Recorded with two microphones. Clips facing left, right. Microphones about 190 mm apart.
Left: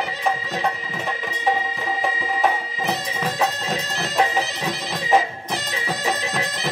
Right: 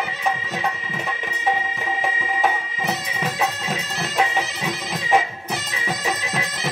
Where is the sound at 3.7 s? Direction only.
35° left (ahead or behind).